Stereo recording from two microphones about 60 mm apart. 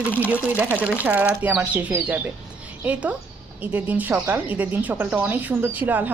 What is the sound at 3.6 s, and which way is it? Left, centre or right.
Speech, right.